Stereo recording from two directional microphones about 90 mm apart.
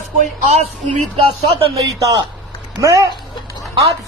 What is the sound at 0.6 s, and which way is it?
Speech, 90° right.